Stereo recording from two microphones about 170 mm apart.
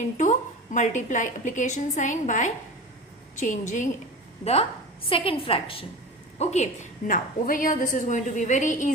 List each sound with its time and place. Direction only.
0.0 s a woman's voice: 45° left (ahead or behind)
5.0 s a woman's voice: 30° left (ahead or behind)
7.1 s a woman's voice: 55° left (ahead or behind)